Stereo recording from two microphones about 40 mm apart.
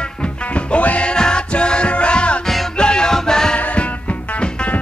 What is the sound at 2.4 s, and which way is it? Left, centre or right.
Music, centre.